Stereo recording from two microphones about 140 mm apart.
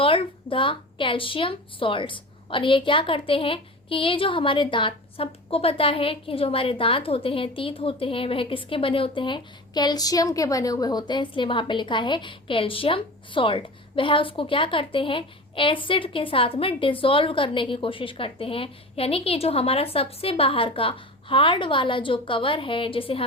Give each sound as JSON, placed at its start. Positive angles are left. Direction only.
{"t": 0.0, "sound": "a woman's voice", "side_deg": 40}